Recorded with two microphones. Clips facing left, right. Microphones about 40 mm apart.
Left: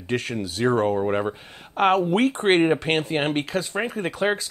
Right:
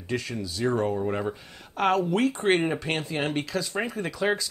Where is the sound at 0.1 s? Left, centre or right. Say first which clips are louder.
Left 4 dB; left.